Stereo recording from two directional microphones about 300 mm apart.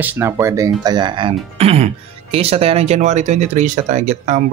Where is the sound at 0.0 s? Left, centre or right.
Centre.